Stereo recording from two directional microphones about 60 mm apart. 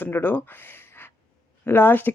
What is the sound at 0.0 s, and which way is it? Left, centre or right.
Speech, left.